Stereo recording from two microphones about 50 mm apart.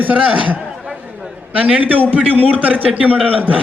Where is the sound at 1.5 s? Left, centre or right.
Right.